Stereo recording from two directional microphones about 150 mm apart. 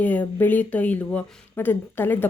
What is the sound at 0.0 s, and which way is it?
Speech, 10° left (ahead or behind).